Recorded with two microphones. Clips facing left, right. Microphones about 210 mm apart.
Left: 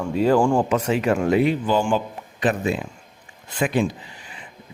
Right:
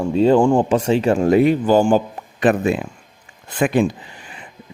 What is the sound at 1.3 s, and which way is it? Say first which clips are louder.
Speech: right 7 dB; 45° right (ahead or behind).